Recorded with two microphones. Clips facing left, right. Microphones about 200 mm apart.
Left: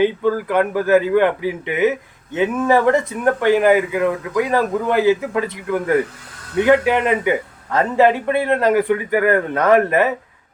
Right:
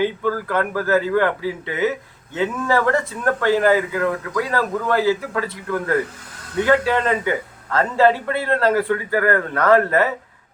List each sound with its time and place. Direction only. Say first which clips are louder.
0.0 s speech: left 4 dB; 20° left (ahead or behind)